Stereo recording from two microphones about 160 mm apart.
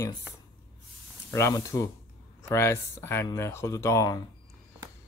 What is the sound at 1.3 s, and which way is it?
Speech, 20° left (ahead or behind).